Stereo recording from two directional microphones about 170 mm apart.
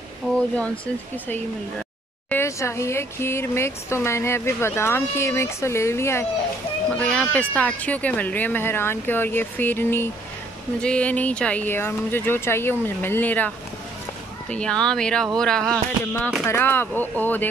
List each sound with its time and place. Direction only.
2.2 s speech: 15° left (ahead or behind)
14.5 s speech: 5° left (ahead or behind)